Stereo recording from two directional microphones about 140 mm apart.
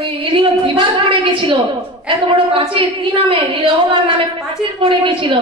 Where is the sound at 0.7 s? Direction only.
35° right (ahead or behind).